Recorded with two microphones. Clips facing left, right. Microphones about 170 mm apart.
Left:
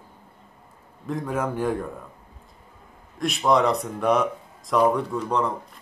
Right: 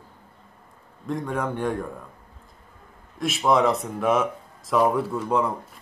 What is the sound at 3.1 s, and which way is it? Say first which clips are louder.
A man's voice: even; centre (ahead or behind).